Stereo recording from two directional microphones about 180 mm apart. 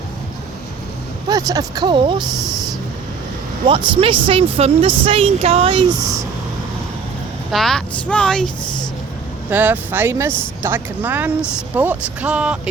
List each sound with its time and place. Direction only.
1.3 s speech: 20° right (ahead or behind)
3.7 s speech: 30° right (ahead or behind)
7.5 s speech: centre (ahead or behind)
8.6 s a sound: 25° left (ahead or behind)
9.5 s speech: 10° right (ahead or behind)